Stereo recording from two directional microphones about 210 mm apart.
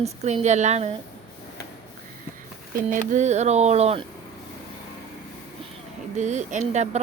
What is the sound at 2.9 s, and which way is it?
Speech, 35° right (ahead or behind).